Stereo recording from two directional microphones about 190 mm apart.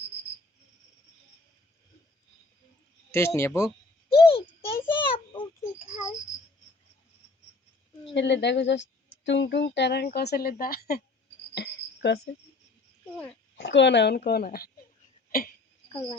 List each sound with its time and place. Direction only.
3.1 s speech: 15° left (ahead or behind)
4.1 s a sound: 30° left (ahead or behind)
8.0 s a woman's voice: 70° left (ahead or behind); by 11.0 s 55° left (ahead or behind)
11.5 s cricket: 60° left (ahead or behind)
13.6 s a woman's voice: 70° left (ahead or behind); by 14.7 s 50° left (ahead or behind)
15.3 s a sound: 50° left (ahead or behind)
15.9 s speech: 25° left (ahead or behind)